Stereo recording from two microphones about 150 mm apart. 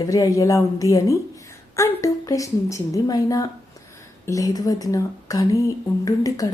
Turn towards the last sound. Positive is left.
turn(degrees=25)  # may be behind; listen again after turning